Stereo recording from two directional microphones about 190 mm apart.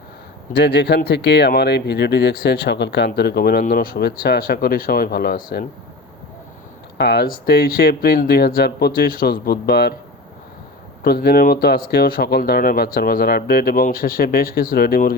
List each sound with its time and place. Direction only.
0.5 s speech: 60° left (ahead or behind)
7.0 s speech: 60° left (ahead or behind)
11.0 s speech: 55° left (ahead or behind)